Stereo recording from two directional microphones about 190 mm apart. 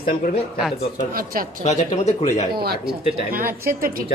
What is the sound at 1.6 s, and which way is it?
Speech, 35° left (ahead or behind).